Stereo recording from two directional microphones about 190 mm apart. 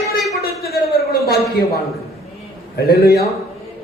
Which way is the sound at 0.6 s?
55° left (ahead or behind).